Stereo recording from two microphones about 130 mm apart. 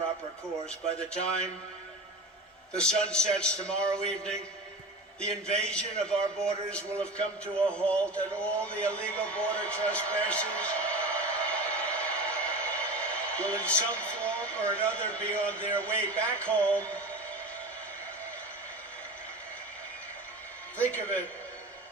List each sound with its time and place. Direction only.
0.9 s a man's voice: 5° left (ahead or behind)
2.7 s a man's voice: 5° left (ahead or behind)
8.6 s a sound: 10° left (ahead or behind)
14.7 s a man's voice: 10° left (ahead or behind)
20.7 s a man's voice: 10° left (ahead or behind)